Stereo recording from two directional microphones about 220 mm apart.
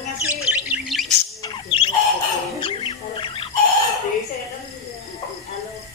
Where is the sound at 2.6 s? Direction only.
25° left (ahead or behind).